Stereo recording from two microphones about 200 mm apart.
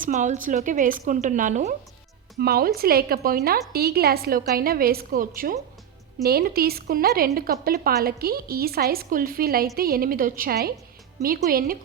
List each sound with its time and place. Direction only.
0.0 s a woman's voice: 40° right (ahead or behind)
2.4 s speech: 50° right (ahead or behind)